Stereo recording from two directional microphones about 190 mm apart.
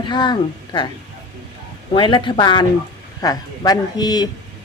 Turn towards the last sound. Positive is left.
turn(degrees=20)  # may be behind; listen again after turning